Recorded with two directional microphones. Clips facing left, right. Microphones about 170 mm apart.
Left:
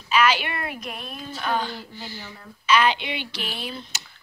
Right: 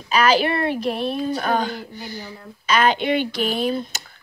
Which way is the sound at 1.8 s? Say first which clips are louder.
Right 4 dB; 15° right (ahead or behind).